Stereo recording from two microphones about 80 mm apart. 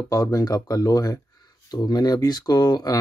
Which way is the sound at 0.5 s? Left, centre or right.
Left.